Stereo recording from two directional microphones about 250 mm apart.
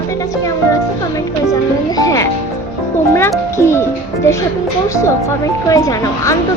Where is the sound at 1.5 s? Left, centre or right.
Centre.